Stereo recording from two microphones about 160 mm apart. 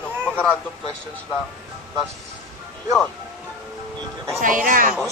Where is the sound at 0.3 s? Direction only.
5° left (ahead or behind).